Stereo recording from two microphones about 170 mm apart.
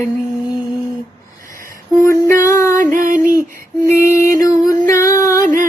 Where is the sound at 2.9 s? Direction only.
55° right (ahead or behind).